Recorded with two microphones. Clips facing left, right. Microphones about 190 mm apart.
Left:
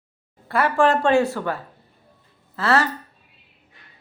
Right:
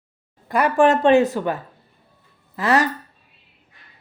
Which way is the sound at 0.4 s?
15° right (ahead or behind).